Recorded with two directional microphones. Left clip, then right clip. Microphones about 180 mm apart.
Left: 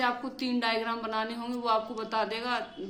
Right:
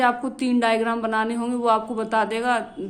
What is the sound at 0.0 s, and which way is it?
A woman's voice, 45° right (ahead or behind).